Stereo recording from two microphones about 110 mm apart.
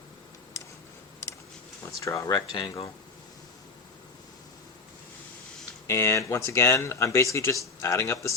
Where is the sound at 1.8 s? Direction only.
25° left (ahead or behind).